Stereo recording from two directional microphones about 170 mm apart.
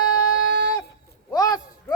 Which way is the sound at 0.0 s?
25° left (ahead or behind).